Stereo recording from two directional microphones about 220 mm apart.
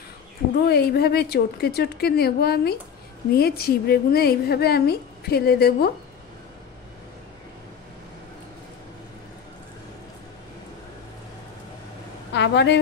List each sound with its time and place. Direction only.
0.7 s a woman's voice: 45° left (ahead or behind)
12.4 s a woman's voice: 50° left (ahead or behind)